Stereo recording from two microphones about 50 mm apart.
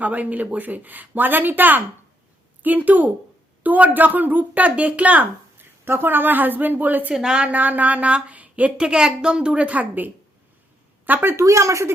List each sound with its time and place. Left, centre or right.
0.0 s speech: right
5.5 s a woman's voice: right
7.1 s a woman's voice: centre
7.5 s speech: right
8.8 s a woman's voice: centre; by 11.3 s right
11.3 s speech: right